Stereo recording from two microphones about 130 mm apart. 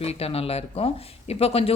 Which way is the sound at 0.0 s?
50° left (ahead or behind).